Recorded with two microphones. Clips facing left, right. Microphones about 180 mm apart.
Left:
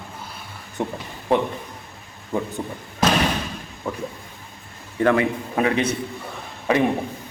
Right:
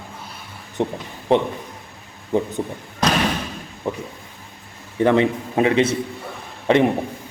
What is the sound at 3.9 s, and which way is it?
A man's voice, 25° right (ahead or behind).